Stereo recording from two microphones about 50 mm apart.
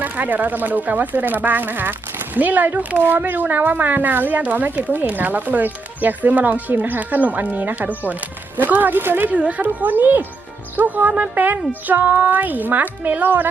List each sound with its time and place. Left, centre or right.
0.0 s speech: right
9.3 s speech: right